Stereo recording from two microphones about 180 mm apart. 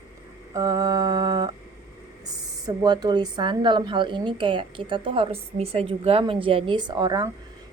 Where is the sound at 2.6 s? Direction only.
20° right (ahead or behind).